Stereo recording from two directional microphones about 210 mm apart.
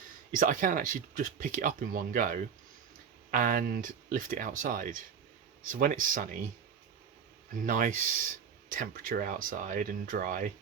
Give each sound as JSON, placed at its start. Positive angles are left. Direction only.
{"t": 0.3, "sound": "speech", "side_deg": -40}
{"t": 7.5, "sound": "speech", "side_deg": -40}